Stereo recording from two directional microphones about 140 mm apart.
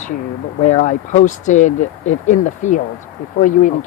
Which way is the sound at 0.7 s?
55° left (ahead or behind).